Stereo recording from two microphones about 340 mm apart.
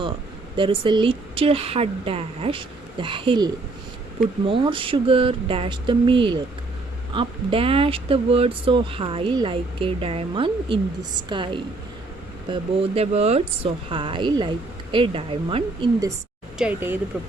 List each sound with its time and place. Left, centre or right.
0.5 s speech: centre